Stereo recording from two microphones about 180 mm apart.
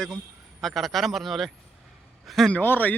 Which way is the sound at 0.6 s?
Centre (ahead or behind).